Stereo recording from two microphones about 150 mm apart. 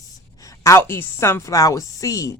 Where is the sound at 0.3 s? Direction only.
20° left (ahead or behind).